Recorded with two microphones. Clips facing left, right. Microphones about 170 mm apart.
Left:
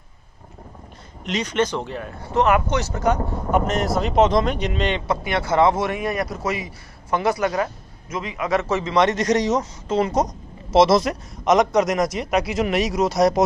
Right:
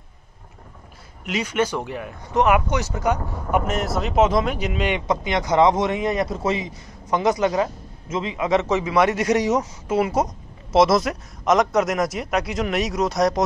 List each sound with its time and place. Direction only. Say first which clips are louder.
1.2 s speech: left 1 dB; 5° right (ahead or behind)